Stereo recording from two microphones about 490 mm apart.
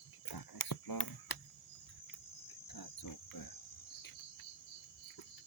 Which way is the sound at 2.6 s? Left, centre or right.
Left.